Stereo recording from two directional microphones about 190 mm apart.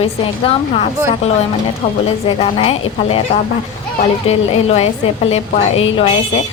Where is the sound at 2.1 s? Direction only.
30° left (ahead or behind).